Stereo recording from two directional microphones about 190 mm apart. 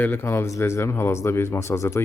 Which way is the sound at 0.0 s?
10° left (ahead or behind).